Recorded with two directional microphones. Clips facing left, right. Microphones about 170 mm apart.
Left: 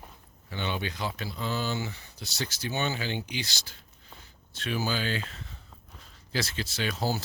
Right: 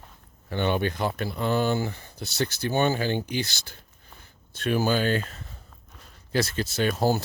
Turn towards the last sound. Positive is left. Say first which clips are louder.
# right 7 dB
turn(degrees=-50)  # may be behind; listen again after turning